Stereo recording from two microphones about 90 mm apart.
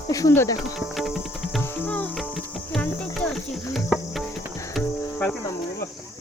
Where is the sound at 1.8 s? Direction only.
15° left (ahead or behind).